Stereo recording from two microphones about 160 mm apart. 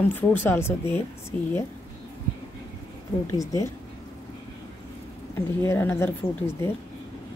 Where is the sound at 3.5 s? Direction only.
20° left (ahead or behind).